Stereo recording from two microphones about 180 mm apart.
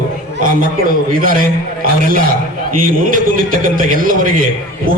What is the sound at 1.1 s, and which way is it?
Speech, 50° right (ahead or behind).